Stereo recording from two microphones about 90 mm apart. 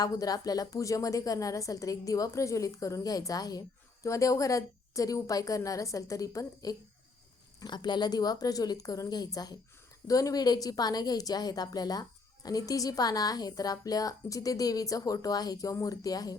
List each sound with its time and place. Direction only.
0.0 s a woman's voice: 45° left (ahead or behind)
7.6 s a woman's voice: 55° left (ahead or behind)